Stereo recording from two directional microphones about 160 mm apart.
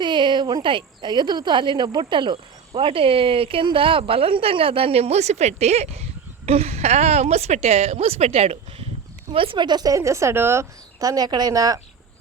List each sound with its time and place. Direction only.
0.0 s cricket: 30° right (ahead or behind)
9.3 s a woman's voice: 35° right (ahead or behind)